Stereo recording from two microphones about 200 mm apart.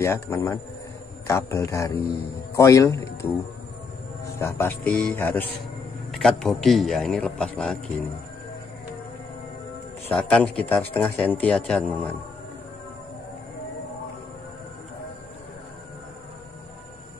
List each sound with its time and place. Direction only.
0.0 s a man's voice: 15° left (ahead or behind)
4.4 s a man's voice: 10° left (ahead or behind)
10.1 s a man's voice: 5° left (ahead or behind)